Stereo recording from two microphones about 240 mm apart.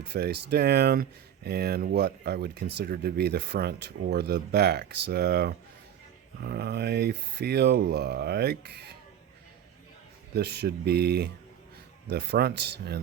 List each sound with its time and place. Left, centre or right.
0.0 s speech: right
10.3 s speech: right